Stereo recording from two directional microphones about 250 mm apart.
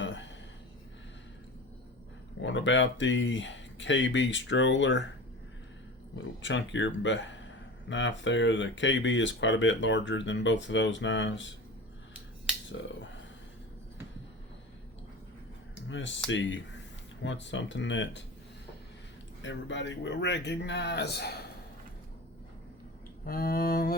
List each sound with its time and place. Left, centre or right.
0.0 s a sound: left
2.4 s speech: left
6.4 s speech: left
15.9 s speech: left
19.4 s speech: left
23.2 s a sound: left